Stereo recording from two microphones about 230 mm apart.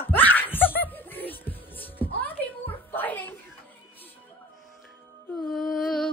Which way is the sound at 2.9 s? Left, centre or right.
Centre.